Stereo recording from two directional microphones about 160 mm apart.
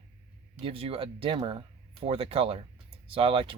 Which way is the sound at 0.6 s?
35° right (ahead or behind).